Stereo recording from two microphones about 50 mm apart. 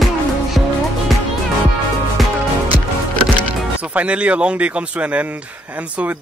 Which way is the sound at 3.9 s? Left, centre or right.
Right.